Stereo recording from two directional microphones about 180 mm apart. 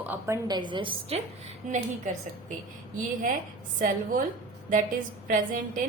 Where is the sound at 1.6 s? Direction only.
45° right (ahead or behind).